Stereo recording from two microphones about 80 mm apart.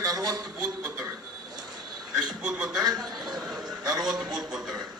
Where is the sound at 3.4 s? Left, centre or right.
Centre.